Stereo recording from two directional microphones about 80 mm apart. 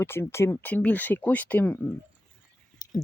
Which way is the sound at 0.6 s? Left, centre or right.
Left.